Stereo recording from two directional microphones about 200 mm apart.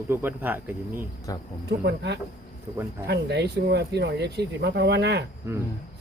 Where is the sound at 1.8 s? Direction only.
55° right (ahead or behind).